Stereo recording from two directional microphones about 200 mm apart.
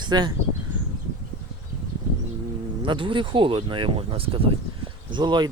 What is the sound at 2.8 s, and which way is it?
Speech, 25° right (ahead or behind).